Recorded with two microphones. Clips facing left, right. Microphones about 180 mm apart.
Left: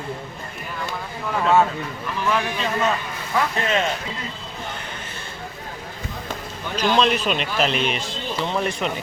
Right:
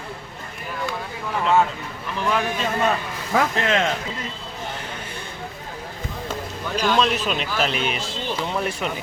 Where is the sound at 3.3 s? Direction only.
90° right.